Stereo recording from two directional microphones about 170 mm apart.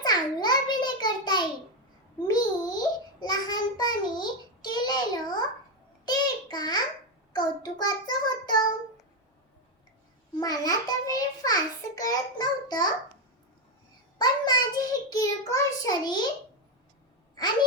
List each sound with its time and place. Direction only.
0.0 s a sound: 25° left (ahead or behind)
7.3 s child singing: 25° left (ahead or behind)
10.4 s a child's voice: 20° left (ahead or behind)
14.2 s child singing: 25° left (ahead or behind)